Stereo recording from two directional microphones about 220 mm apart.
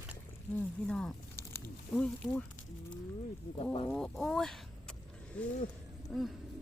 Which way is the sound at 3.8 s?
5° left (ahead or behind).